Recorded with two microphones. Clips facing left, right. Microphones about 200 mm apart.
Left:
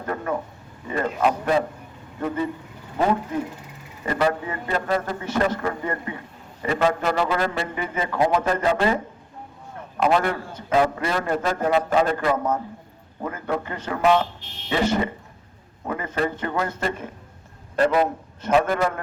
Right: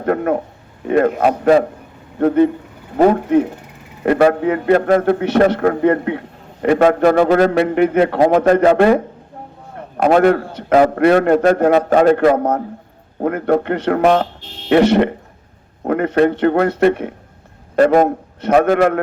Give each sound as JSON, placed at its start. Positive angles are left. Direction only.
{"t": 0.0, "sound": "a man's voice", "side_deg": -70}
{"t": 10.0, "sound": "a man's voice", "side_deg": -55}
{"t": 17.7, "sound": "speech", "side_deg": -50}
{"t": 18.4, "sound": "a man's voice", "side_deg": -70}